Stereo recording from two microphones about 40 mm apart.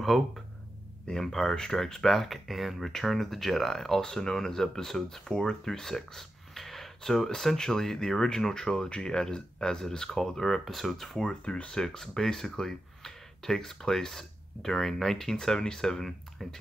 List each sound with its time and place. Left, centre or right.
0.1 s speech: centre
1.2 s speech: centre
11.2 s speech: left
11.7 s speech: centre